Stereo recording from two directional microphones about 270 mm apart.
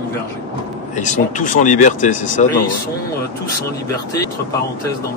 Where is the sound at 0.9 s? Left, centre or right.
Left.